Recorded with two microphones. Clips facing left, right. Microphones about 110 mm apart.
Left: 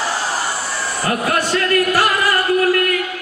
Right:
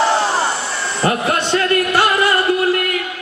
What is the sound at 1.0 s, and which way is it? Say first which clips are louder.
Music: right 2 dB; 25° right (ahead or behind).